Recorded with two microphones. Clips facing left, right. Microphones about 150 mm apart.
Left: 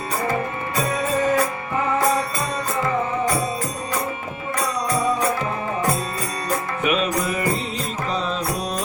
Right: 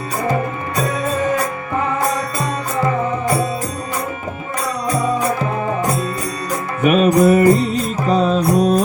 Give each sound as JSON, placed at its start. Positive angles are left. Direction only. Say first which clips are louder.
{"t": 6.8, "sound": "music", "louder": "right 11 dB", "side_deg": -45}